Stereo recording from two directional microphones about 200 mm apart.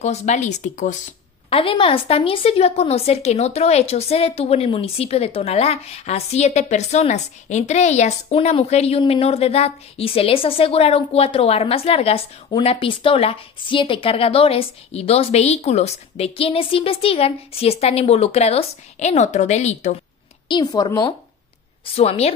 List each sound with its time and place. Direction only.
0.0 s a woman's voice: 35° left (ahead or behind)
1.5 s a woman's voice: 25° left (ahead or behind)
20.4 s a woman's voice: 20° left (ahead or behind)
21.9 s a woman's voice: 30° left (ahead or behind)